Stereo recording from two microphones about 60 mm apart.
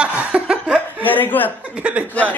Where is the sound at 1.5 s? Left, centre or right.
Right.